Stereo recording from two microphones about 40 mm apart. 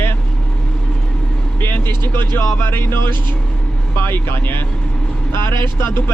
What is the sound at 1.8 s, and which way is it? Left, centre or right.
Speech, left.